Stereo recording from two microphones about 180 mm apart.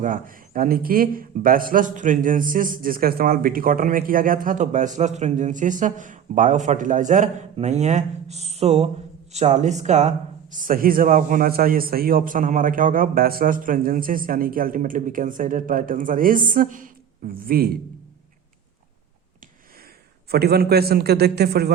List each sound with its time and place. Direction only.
0.0 s a man's voice: 50° right (ahead or behind)
20.3 s a man's voice: 60° right (ahead or behind)